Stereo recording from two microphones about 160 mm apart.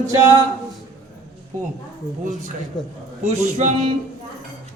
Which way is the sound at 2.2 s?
50° right (ahead or behind).